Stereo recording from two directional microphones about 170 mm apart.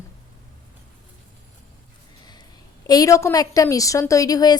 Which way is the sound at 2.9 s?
20° left (ahead or behind).